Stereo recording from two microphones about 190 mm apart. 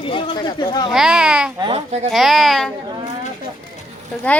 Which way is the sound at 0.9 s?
5° right (ahead or behind).